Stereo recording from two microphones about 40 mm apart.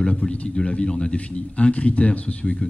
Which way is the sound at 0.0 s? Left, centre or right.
Left.